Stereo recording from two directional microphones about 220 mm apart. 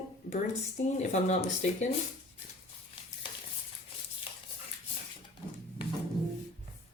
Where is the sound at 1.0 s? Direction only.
30° left (ahead or behind).